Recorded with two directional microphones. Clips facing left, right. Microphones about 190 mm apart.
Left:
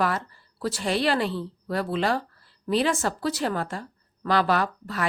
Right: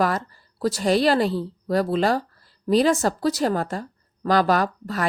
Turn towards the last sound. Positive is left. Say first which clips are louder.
# right 3 dB
turn(degrees=-40)  # may be behind; listen again after turning